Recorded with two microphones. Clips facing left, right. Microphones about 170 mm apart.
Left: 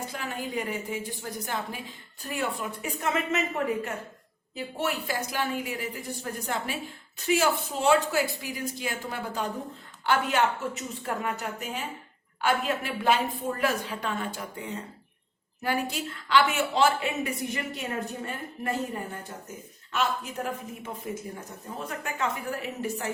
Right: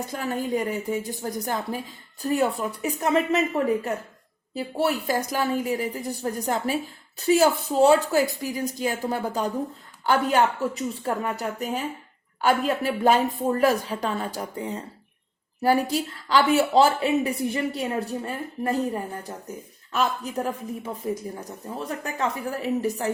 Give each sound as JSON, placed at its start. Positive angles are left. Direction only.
{"t": 0.1, "sound": "speech", "side_deg": -40}
{"t": 4.5, "sound": "speech", "side_deg": -35}